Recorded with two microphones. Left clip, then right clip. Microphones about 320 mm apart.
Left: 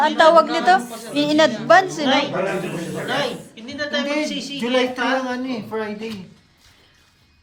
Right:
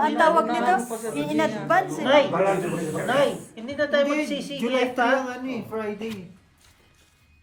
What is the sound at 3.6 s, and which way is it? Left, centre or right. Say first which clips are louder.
A woman's voice: right 2 dB; centre.